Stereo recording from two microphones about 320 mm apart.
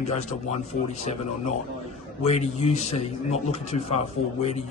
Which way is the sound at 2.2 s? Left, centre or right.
Centre.